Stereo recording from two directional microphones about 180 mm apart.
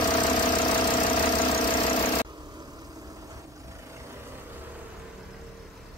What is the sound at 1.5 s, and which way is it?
Engine, 30° left (ahead or behind).